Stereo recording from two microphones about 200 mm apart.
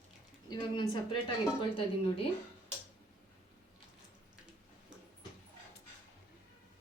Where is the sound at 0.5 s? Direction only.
20° left (ahead or behind).